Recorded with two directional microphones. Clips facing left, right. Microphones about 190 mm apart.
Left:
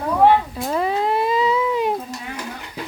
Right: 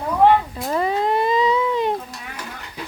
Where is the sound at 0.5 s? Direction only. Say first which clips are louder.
Even; centre (ahead or behind).